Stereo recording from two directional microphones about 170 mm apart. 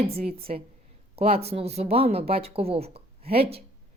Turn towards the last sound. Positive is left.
turn(degrees=-35)  # may be behind; listen again after turning